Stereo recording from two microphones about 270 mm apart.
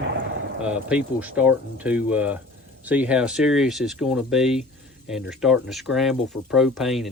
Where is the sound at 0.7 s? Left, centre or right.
Centre.